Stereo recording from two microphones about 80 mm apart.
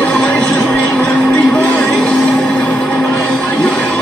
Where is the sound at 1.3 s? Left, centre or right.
Centre.